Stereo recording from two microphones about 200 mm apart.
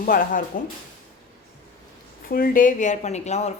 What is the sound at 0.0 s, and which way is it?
Speech, 45° left (ahead or behind).